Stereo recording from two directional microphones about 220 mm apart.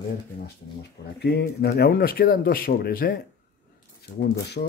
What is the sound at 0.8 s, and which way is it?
Speech, 50° left (ahead or behind).